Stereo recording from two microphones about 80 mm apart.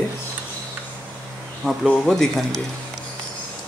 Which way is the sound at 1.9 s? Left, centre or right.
Centre.